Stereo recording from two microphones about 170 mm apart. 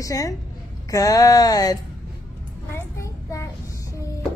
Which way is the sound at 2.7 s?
15° left (ahead or behind).